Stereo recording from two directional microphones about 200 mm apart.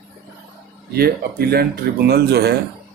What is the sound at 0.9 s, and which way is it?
Speech, 50° right (ahead or behind).